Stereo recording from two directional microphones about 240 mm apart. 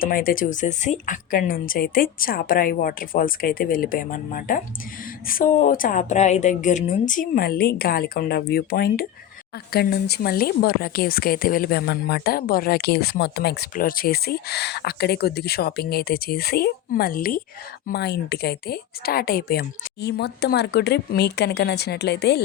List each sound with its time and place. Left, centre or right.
0.0 s a woman's voice: left